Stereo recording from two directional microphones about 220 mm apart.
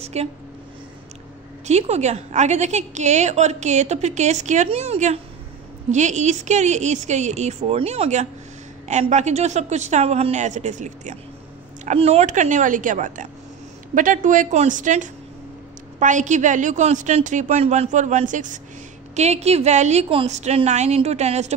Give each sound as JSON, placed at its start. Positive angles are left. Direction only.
{"t": 0.0, "sound": "speech", "side_deg": -30}
{"t": 1.7, "sound": "a woman's voice", "side_deg": -30}